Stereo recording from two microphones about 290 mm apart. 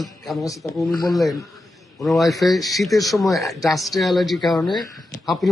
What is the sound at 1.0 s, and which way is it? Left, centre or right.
A man's voice, centre.